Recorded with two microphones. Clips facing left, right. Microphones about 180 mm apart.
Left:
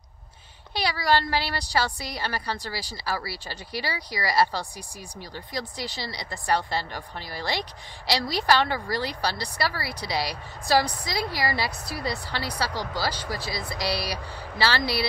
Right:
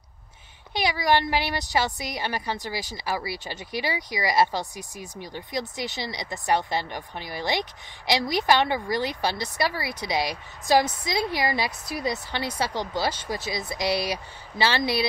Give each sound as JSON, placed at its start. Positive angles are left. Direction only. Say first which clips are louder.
{"t": 0.7, "sound": "a woman's voice", "louder": "right 1 dB", "side_deg": -20}